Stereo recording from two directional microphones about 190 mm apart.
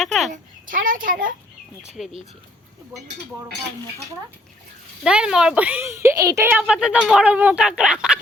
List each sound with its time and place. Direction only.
0.0 s a child's voice: centre (ahead or behind)
0.3 s a child's voice: 45° right (ahead or behind)
2.0 s speech: centre (ahead or behind)
5.0 s speech: 5° right (ahead or behind)